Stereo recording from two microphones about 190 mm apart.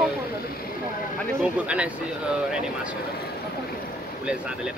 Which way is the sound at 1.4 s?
5° right (ahead or behind).